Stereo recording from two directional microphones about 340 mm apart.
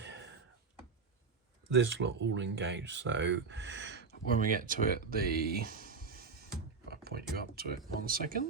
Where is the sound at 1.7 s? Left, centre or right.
Right.